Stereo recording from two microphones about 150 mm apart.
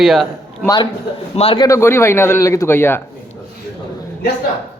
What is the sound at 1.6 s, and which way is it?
Speech, 20° left (ahead or behind).